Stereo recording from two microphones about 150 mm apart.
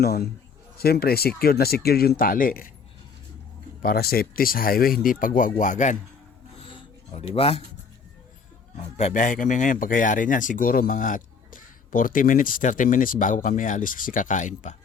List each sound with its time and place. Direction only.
0.0 s speech: 90° left; by 2.7 s 70° left (ahead or behind)
3.8 s speech: 85° left; by 6.0 s 55° left (ahead or behind)
6.7 s music: 40° left (ahead or behind)
8.8 s speech: 45° left (ahead or behind)